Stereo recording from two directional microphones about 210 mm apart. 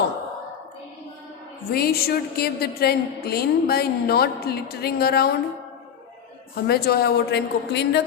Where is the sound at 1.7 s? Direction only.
45° left (ahead or behind).